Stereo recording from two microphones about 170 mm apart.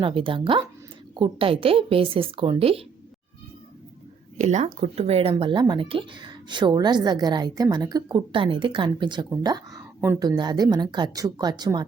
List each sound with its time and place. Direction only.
0.0 s a woman's voice: 30° right (ahead or behind)
4.4 s speech: 40° right (ahead or behind); by 11.9 s 25° right (ahead or behind)